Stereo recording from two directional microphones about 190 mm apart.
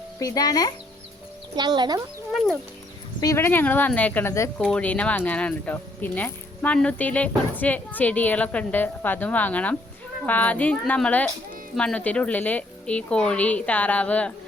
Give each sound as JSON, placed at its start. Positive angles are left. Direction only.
{"t": 0.2, "sound": "speech", "side_deg": 20}
{"t": 1.5, "sound": "a child's voice", "side_deg": -20}
{"t": 2.3, "sound": "speech", "side_deg": 0}
{"t": 3.2, "sound": "speech", "side_deg": 15}